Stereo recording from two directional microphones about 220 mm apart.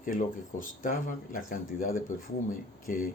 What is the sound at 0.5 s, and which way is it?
Speech, 35° left (ahead or behind).